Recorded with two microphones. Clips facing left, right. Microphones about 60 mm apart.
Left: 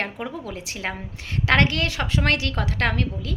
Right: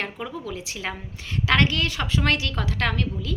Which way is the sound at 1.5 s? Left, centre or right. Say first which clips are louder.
Left 1 dB; left.